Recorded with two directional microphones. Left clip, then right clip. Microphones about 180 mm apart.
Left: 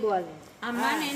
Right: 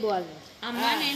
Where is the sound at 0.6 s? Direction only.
30° left (ahead or behind).